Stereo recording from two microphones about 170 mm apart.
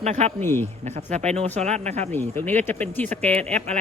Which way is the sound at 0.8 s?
40° right (ahead or behind).